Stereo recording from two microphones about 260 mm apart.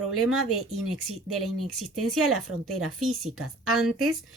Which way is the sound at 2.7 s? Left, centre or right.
Right.